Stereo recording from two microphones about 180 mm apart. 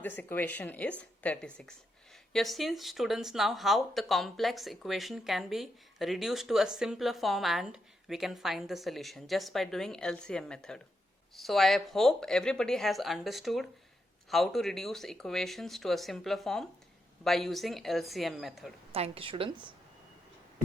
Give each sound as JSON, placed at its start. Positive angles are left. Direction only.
{"t": 0.0, "sound": "speech", "side_deg": 10}
{"t": 18.9, "sound": "a woman's voice", "side_deg": -35}